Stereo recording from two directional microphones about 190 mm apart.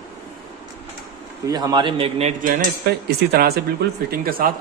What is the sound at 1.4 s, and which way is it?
Speech, 20° right (ahead or behind).